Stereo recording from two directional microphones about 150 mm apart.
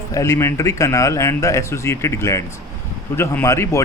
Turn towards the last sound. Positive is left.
turn(degrees=20)  # may be behind; listen again after turning